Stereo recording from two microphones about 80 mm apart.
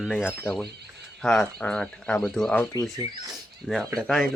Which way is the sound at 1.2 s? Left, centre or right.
Centre.